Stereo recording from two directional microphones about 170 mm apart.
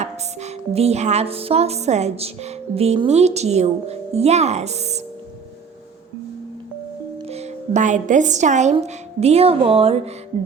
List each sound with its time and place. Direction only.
0.0 s music: 40° right (ahead or behind)
7.3 s speech: 40° right (ahead or behind)
9.2 s music: 35° right (ahead or behind)